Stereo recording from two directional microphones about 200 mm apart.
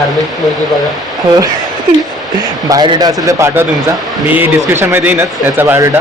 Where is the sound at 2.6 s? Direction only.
20° right (ahead or behind).